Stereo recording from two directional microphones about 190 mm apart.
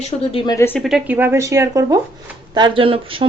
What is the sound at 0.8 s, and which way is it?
A woman's voice, centre (ahead or behind).